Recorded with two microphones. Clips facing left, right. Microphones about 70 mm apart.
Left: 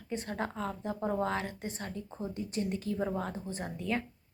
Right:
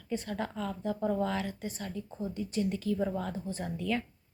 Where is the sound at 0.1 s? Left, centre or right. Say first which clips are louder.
Right 1 dB; left.